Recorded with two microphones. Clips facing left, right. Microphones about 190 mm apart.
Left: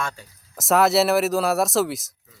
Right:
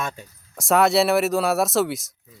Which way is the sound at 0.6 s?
Centre (ahead or behind).